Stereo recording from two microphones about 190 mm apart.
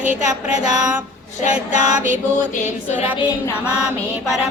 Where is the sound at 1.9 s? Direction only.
40° right (ahead or behind).